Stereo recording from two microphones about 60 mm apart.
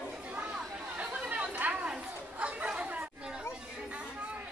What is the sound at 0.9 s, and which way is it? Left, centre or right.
Chatter, right.